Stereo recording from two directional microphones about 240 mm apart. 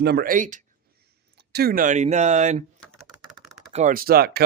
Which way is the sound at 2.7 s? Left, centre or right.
Centre.